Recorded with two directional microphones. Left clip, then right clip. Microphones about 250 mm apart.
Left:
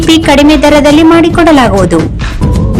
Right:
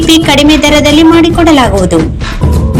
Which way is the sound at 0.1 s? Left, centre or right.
Left.